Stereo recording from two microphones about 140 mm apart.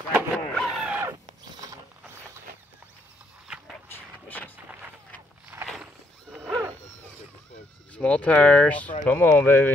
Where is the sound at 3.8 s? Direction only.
15° left (ahead or behind).